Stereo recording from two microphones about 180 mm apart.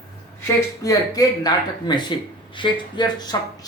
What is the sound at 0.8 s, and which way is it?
Speech, 20° left (ahead or behind).